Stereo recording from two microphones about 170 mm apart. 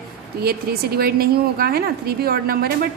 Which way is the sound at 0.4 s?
65° right (ahead or behind).